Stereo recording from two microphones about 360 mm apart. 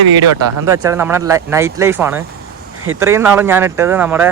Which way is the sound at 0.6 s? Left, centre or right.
Centre.